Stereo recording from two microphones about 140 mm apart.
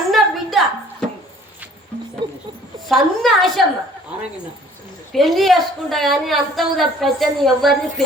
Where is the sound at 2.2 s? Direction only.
35° right (ahead or behind).